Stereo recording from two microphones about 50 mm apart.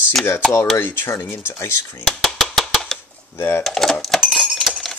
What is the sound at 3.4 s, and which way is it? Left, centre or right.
Speech, left.